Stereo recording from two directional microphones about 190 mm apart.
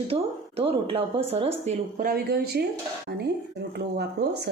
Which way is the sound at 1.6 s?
45° right (ahead or behind).